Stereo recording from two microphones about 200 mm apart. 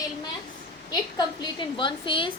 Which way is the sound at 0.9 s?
20° left (ahead or behind).